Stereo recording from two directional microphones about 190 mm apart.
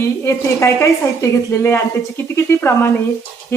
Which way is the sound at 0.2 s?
15° left (ahead or behind).